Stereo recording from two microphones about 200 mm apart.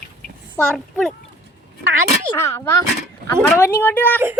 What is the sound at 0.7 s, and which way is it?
Speech, centre (ahead or behind).